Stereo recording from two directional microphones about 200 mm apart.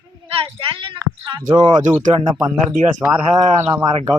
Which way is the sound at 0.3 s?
25° right (ahead or behind).